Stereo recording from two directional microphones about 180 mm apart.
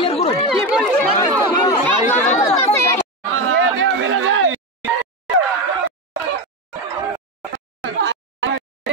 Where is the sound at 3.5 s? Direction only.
90° right.